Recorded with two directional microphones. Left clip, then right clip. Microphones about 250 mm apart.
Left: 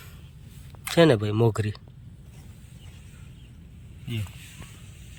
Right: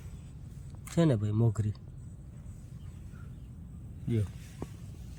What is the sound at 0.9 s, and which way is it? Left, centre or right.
Speech, left.